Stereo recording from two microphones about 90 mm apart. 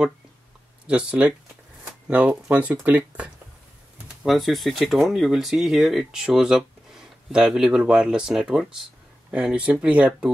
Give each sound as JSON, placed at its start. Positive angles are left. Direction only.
{"t": 0.8, "sound": "speech", "side_deg": -15}
{"t": 4.2, "sound": "speech", "side_deg": 0}